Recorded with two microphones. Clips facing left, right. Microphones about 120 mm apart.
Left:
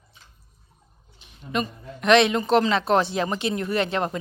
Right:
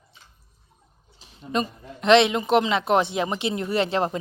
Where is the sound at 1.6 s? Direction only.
25° right (ahead or behind).